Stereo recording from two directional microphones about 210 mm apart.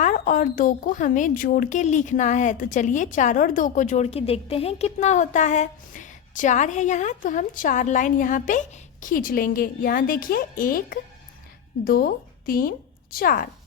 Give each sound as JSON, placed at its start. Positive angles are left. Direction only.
{"t": 0.0, "sound": "a woman's voice", "side_deg": 40}